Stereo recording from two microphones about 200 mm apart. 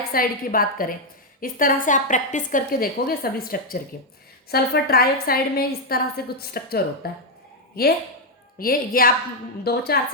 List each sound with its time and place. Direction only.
0.1 s a woman's voice: 45° left (ahead or behind)